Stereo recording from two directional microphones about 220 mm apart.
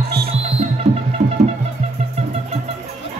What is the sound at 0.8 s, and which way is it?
Music, 30° right (ahead or behind).